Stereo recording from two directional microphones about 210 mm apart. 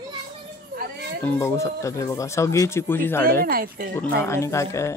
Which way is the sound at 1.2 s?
15° left (ahead or behind).